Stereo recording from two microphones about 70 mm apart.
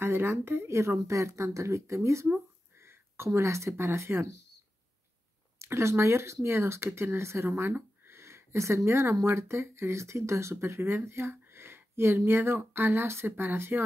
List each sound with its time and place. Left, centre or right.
0.0 s speech: right
5.6 s speech: right
8.1 s a sound: right
9.2 s speech: right